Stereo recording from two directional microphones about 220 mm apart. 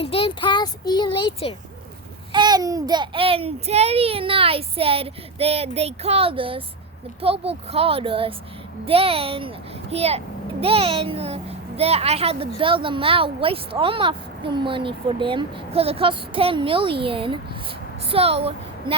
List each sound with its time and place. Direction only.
0.0 s a child's voice: 25° left (ahead or behind)
2.3 s a child's voice: 20° right (ahead or behind)